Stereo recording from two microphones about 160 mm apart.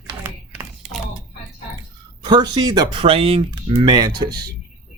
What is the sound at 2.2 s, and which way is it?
Speech, 25° right (ahead or behind).